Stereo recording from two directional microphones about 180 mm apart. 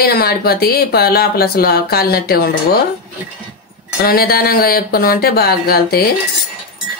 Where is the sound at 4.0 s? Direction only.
60° left (ahead or behind).